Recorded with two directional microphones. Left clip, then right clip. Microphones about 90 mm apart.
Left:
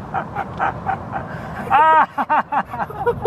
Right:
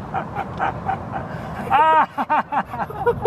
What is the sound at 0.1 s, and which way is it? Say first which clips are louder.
Dog: left 2 dB; 15° right (ahead or behind).